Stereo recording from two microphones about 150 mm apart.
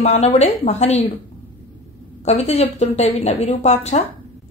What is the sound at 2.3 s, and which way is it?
Speech, 45° left (ahead or behind).